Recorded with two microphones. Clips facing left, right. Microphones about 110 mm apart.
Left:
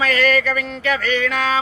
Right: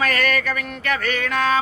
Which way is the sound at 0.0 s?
45° right (ahead or behind).